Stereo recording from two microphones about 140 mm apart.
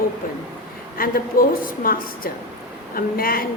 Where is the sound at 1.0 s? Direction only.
90° left.